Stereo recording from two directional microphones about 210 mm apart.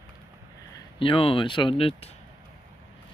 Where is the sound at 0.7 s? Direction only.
25° left (ahead or behind).